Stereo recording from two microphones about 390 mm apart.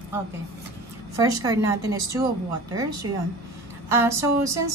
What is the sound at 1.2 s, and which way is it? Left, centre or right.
A woman's voice, centre.